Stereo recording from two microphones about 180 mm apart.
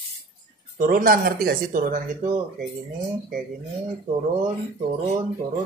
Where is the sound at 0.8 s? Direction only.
50° right (ahead or behind).